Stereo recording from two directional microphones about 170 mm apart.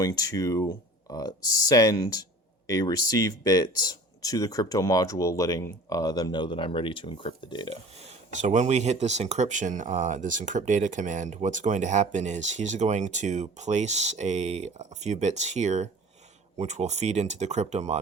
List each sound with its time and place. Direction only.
0.0 s speech: 20° left (ahead or behind)
8.0 s speech: 45° right (ahead or behind)